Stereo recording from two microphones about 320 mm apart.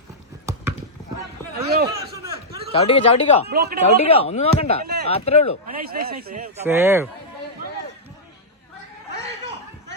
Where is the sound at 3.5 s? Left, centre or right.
Right.